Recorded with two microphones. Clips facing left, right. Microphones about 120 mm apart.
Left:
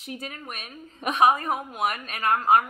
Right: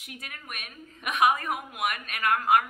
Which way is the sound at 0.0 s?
30° left (ahead or behind).